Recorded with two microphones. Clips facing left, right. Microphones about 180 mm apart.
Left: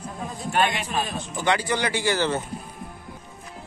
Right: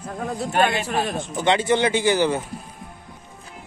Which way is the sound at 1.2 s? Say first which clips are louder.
Right 3 dB; 25° right (ahead or behind).